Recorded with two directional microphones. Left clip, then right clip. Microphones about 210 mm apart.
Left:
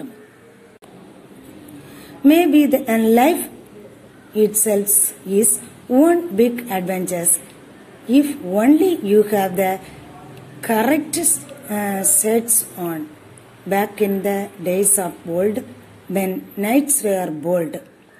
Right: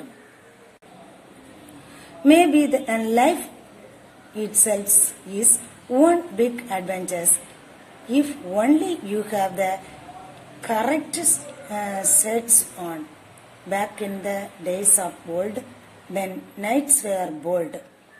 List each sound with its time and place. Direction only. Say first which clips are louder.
2.2 s a woman's voice: left 2 dB; 25° left (ahead or behind)
4.4 s a woman's voice: left 7 dB; 30° left (ahead or behind)
5.9 s a woman's voice: left 3 dB; 30° left (ahead or behind)